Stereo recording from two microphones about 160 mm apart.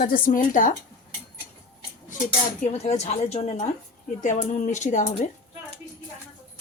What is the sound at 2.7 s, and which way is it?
Speech, 45° left (ahead or behind).